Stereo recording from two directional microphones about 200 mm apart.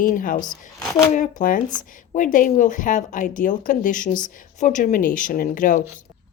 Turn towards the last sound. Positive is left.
turn(degrees=40)  # may be behind; listen again after turning